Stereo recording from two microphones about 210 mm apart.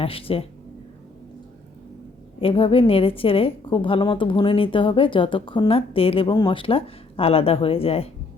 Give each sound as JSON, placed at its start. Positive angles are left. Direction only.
{"t": 0.0, "sound": "a woman's voice", "side_deg": 25}
{"t": 2.4, "sound": "a woman's voice", "side_deg": 25}